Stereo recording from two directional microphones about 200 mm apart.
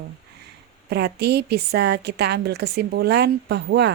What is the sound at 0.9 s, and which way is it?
A woman's voice, 55° right (ahead or behind).